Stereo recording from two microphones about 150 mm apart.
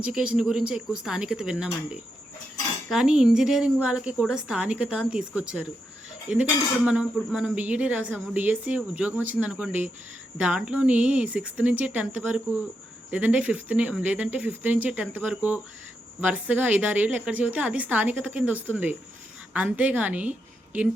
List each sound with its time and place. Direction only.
0.0 s speech: 5° right (ahead or behind)
6.8 s speech: 5° right (ahead or behind)